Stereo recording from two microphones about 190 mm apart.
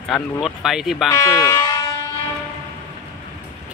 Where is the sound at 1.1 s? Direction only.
15° left (ahead or behind).